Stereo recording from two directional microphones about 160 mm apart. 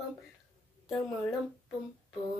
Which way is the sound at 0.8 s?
Centre (ahead or behind).